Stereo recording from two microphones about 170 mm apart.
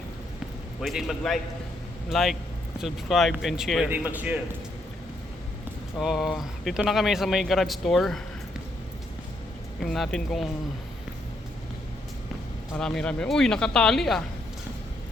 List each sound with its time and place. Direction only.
0.8 s a man's voice: centre (ahead or behind)
6.0 s speech: centre (ahead or behind)
9.8 s speech: centre (ahead or behind)
12.7 s speech: 5° left (ahead or behind)